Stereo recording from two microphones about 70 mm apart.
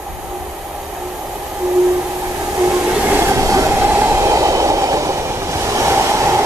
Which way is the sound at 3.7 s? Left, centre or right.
Right.